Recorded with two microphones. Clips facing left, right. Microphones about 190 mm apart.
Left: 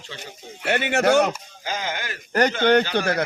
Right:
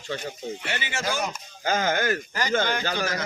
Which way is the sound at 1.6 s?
50° right (ahead or behind).